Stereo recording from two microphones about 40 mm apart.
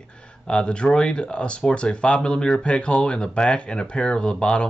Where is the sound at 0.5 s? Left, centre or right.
Left.